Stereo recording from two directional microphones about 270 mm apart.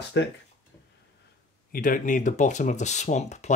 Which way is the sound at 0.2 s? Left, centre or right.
Left.